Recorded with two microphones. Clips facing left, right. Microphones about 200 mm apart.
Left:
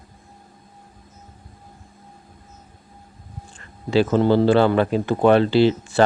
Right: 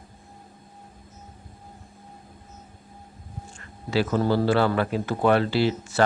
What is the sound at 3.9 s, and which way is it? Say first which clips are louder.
Speech: left 6 dB; 25° left (ahead or behind).